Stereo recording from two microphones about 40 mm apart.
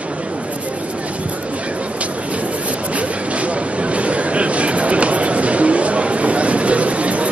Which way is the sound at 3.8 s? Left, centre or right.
Right.